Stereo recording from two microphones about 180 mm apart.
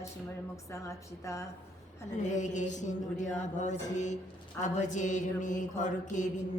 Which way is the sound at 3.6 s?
40° left (ahead or behind).